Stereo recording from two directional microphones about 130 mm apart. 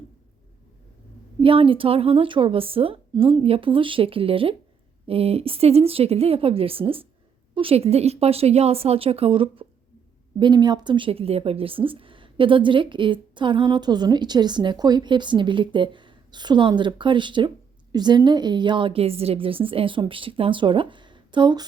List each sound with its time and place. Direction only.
1.4 s a woman's voice: 45° right (ahead or behind)
10.4 s speech: 35° right (ahead or behind)